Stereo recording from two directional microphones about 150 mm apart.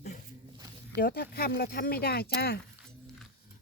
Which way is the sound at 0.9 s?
90° left.